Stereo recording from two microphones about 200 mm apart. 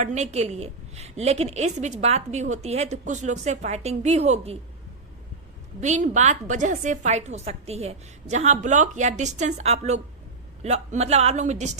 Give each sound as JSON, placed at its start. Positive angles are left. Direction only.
{"t": 0.0, "sound": "a woman's voice", "side_deg": -35}
{"t": 5.8, "sound": "a woman's voice", "side_deg": -35}